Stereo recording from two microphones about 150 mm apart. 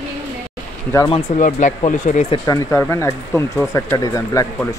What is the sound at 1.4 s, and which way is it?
Speech, 55° left (ahead or behind).